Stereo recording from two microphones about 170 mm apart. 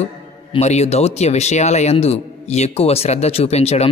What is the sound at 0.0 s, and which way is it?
A man's voice, 40° left (ahead or behind).